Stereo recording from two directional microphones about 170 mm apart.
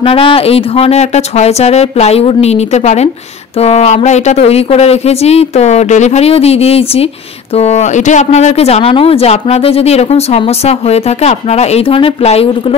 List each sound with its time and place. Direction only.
0.0 s speech: 30° left (ahead or behind)